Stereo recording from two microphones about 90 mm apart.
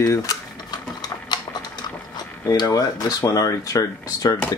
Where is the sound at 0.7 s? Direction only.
50° left (ahead or behind).